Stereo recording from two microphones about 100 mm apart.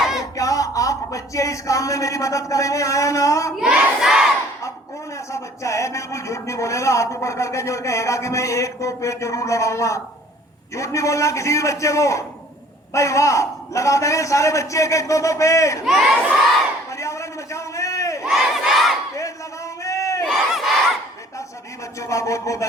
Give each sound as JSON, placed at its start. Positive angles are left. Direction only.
{"t": 0.0, "sound": "a sound", "side_deg": -5}
{"t": 0.3, "sound": "a man's voice", "side_deg": 35}
{"t": 3.5, "sound": "crowd", "side_deg": -10}
{"t": 5.1, "sound": "a man's voice", "side_deg": 30}
{"t": 15.9, "sound": "crowd", "side_deg": 0}
{"t": 16.9, "sound": "a sound", "side_deg": 30}
{"t": 18.3, "sound": "crowd", "side_deg": 0}
{"t": 19.1, "sound": "a sound", "side_deg": 30}
{"t": 20.2, "sound": "battle cry", "side_deg": -5}
{"t": 21.9, "sound": "a man's voice", "side_deg": 30}